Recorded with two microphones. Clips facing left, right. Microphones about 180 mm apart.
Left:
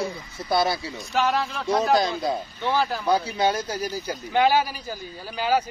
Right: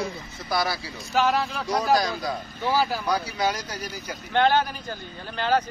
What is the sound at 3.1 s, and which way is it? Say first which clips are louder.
Speech: left 3 dB; 25° left (ahead or behind).